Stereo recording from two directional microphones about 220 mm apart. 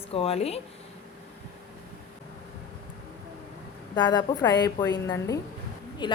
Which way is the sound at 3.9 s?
20° left (ahead or behind).